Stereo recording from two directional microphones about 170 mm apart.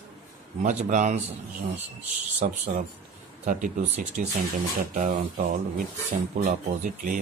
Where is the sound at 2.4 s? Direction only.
45° right (ahead or behind).